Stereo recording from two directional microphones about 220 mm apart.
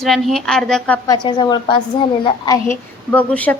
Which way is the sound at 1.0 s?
20° left (ahead or behind).